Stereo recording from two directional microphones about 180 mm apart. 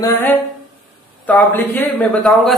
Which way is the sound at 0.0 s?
10° left (ahead or behind).